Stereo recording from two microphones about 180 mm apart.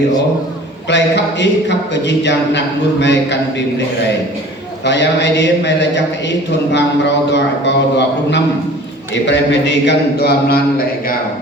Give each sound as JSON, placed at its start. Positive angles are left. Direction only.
{"t": 0.9, "sound": "a man's voice", "side_deg": 75}
{"t": 4.9, "sound": "a man's voice", "side_deg": 75}